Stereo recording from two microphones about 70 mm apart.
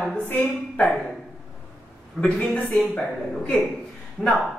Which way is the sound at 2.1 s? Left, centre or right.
Centre.